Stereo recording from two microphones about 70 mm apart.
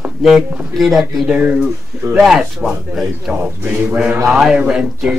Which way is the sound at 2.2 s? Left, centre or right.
Centre.